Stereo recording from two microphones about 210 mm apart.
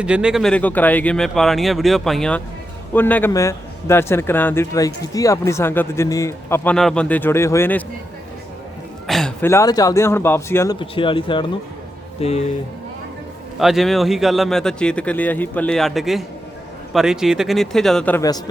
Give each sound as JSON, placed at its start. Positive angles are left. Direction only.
{"t": 0.0, "sound": "a man's voice", "side_deg": -5}
{"t": 9.0, "sound": "speech", "side_deg": 0}
{"t": 10.8, "sound": "speech", "side_deg": 25}
{"t": 13.6, "sound": "a man's voice", "side_deg": 0}